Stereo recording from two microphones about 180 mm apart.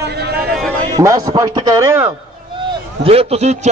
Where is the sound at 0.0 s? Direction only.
65° right (ahead or behind).